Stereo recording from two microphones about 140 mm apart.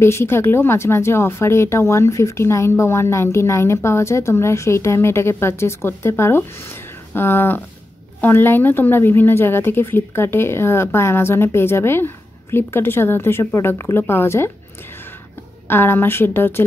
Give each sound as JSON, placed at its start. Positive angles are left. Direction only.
{"t": 0.0, "sound": "a woman's voice", "side_deg": 15}
{"t": 15.7, "sound": "a woman's voice", "side_deg": 15}